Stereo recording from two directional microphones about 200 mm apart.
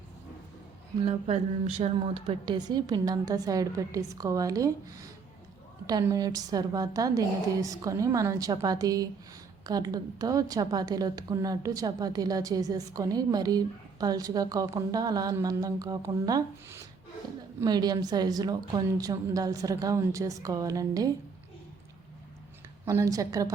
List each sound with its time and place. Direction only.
1.8 s a woman's voice: 30° right (ahead or behind)
22.9 s a woman's voice: 15° right (ahead or behind)